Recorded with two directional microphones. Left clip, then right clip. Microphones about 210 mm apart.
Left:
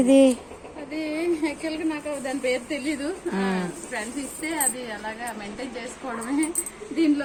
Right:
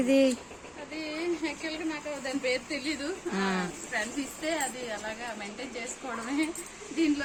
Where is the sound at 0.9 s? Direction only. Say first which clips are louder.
Left 7 dB; 35° left (ahead or behind).